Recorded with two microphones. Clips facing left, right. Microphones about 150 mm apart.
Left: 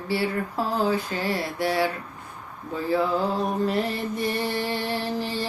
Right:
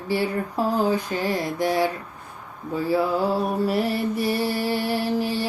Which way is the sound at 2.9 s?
10° right (ahead or behind).